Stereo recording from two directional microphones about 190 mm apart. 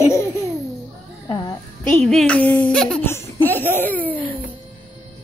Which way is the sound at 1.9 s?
5° left (ahead or behind).